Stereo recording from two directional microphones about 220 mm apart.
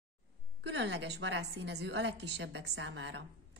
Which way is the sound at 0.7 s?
55° right (ahead or behind).